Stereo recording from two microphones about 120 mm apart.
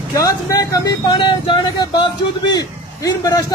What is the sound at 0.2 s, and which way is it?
Speech, 30° left (ahead or behind).